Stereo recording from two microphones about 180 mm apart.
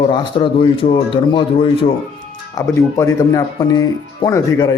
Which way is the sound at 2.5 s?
20° left (ahead or behind).